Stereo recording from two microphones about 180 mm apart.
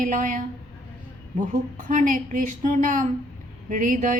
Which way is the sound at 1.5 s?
45° right (ahead or behind).